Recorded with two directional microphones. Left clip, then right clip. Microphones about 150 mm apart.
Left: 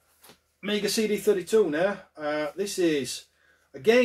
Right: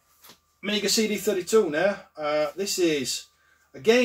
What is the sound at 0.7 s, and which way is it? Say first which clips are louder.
Speech: right 2 dB; 15° left (ahead or behind).